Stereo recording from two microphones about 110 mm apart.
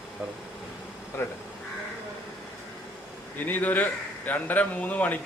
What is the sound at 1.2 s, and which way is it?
Speech, 20° left (ahead or behind).